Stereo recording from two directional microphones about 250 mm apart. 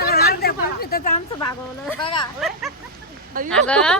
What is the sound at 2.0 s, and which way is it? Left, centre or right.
Speech, centre.